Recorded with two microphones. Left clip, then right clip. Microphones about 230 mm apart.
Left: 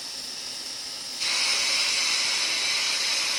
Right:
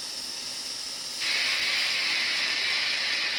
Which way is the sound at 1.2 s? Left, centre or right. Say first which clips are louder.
Left 1 dB; left.